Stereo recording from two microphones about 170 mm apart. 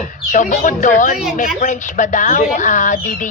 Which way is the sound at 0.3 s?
50° left (ahead or behind).